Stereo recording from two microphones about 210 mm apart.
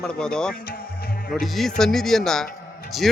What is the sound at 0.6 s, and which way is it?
Music, 45° left (ahead or behind).